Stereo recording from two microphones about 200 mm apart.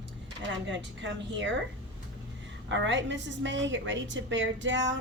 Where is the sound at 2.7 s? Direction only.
65° right (ahead or behind).